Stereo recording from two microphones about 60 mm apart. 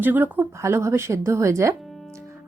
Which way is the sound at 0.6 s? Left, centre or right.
Right.